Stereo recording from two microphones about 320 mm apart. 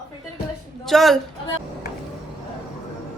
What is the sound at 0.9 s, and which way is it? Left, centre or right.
Speech, centre.